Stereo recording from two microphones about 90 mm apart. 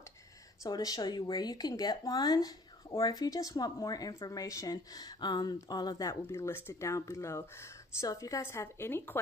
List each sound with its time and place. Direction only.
0.7 s speech: 45° left (ahead or behind)
6.2 s a woman's voice: 30° left (ahead or behind)